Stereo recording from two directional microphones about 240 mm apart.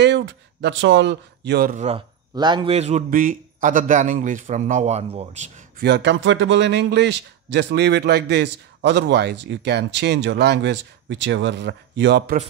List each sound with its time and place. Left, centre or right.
0.0 s speech: right
5.8 s speech: right